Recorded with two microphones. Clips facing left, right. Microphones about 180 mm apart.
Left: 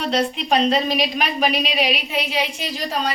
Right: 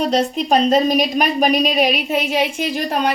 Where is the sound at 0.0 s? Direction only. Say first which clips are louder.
Right 4 dB; 40° right (ahead or behind).